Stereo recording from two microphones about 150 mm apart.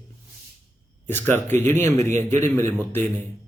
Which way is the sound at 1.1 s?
15° left (ahead or behind).